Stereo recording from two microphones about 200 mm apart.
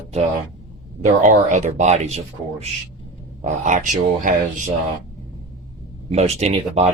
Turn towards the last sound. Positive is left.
turn(degrees=-30)  # may be behind; listen again after turning